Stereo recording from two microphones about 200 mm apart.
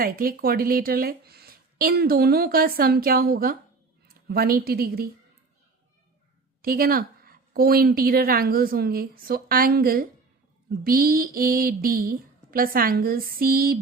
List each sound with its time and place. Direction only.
0.0 s a woman's voice: 45° right (ahead or behind)
6.6 s a woman's voice: 45° right (ahead or behind)